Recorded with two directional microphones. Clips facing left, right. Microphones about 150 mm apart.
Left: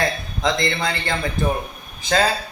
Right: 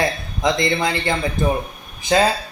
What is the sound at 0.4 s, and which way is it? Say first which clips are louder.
Speech: right 3 dB; 15° right (ahead or behind).